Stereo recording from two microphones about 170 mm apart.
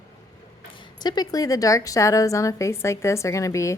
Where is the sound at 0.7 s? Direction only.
25° left (ahead or behind).